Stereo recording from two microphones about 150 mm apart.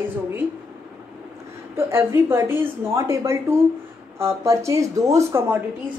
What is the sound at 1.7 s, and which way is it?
A woman's voice, 15° right (ahead or behind).